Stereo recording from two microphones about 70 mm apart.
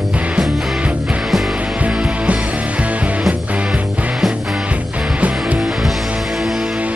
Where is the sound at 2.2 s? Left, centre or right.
Centre.